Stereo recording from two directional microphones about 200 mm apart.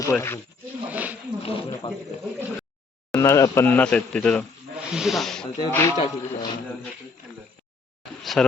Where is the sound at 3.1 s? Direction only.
15° left (ahead or behind).